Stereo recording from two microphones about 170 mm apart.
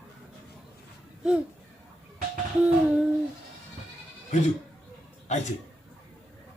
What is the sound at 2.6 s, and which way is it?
Hoot, 5° right (ahead or behind).